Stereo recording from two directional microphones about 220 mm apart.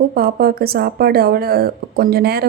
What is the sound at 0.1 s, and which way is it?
Speech, 45° right (ahead or behind).